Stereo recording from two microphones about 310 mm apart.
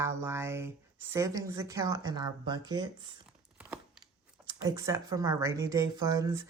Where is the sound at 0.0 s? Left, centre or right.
Centre.